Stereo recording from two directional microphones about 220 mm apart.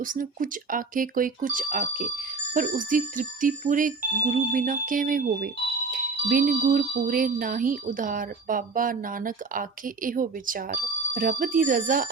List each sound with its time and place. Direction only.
0.0 s speech: 40° right (ahead or behind)